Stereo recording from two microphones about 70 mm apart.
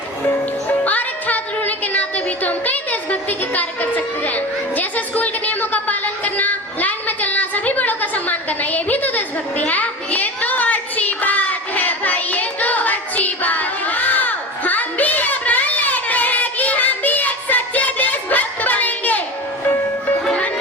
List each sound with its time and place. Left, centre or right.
0.9 s music: left
20.2 s music: centre